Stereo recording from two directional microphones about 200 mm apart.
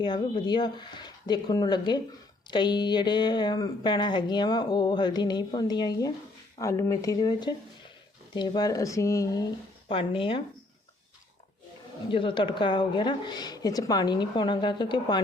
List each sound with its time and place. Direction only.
0.0 s speech: 20° left (ahead or behind)
12.1 s speech: 25° left (ahead or behind)